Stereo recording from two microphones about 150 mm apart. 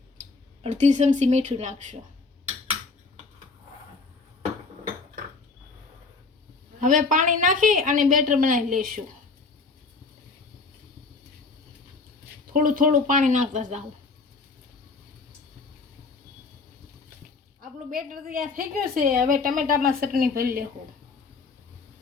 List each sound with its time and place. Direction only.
0.6 s speech: 50° right (ahead or behind)
6.7 s a woman's voice: 60° right (ahead or behind)
12.5 s a woman's voice: 60° right (ahead or behind)
17.6 s a woman's voice: 65° right (ahead or behind)